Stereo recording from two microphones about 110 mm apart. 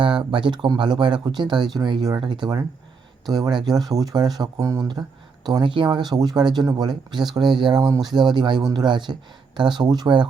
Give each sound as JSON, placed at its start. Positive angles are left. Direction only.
{"t": 0.0, "sound": "speech", "side_deg": -45}
{"t": 5.5, "sound": "speech", "side_deg": -45}